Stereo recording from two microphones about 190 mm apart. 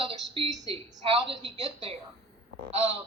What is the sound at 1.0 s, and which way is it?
Speech, 30° right (ahead or behind).